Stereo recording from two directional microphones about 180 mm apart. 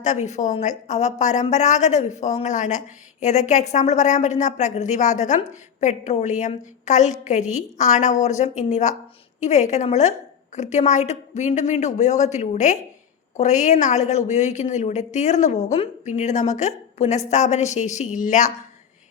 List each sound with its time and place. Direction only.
0.0 s a woman's voice: 40° left (ahead or behind)